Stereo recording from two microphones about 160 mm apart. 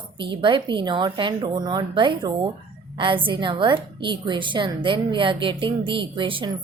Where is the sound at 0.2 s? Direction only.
30° right (ahead or behind).